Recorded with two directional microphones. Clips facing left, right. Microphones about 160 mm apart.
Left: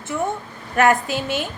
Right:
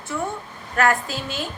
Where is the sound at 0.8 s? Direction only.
15° left (ahead or behind).